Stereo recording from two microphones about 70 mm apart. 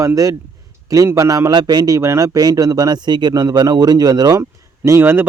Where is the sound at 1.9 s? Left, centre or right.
Right.